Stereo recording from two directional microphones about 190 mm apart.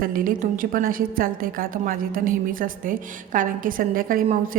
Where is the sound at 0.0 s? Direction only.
45° right (ahead or behind).